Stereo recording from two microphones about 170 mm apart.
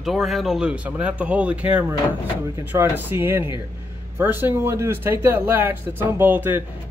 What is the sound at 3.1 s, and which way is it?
Speech, 15° right (ahead or behind).